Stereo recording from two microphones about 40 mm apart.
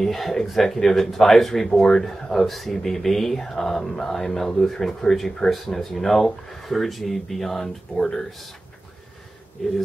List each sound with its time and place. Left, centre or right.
0.0 s speech: centre
8.3 s speech: centre
9.6 s speech: centre